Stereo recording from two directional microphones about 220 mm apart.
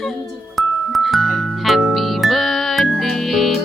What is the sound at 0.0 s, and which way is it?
Music, centre (ahead or behind).